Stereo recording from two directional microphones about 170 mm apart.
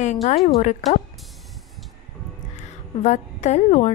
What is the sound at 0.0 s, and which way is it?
Speech, 45° left (ahead or behind).